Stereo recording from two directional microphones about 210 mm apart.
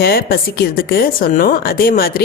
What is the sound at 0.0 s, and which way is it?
A woman's voice, 45° left (ahead or behind).